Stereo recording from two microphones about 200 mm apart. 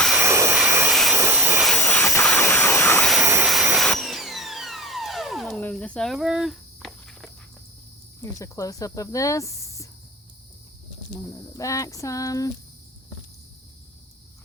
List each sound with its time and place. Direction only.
0.2 s jet engine: 15° right (ahead or behind)
1.7 s a sound: 5° left (ahead or behind)
3.4 s vacuum cleaner: centre (ahead or behind)
8.2 s speech: 15° left (ahead or behind)
11.5 s speech: 15° left (ahead or behind)